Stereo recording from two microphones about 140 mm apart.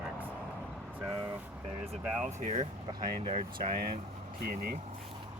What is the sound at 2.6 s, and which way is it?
Speech, 40° right (ahead or behind).